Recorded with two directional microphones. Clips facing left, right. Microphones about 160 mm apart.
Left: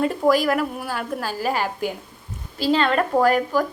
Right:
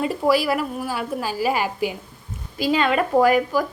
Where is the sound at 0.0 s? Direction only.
5° right (ahead or behind).